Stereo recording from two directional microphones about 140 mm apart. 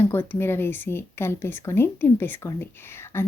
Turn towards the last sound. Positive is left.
turn(degrees=15)  # may be behind; listen again after turning